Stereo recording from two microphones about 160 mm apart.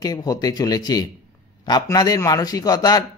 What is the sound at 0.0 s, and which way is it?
Speech, 25° left (ahead or behind).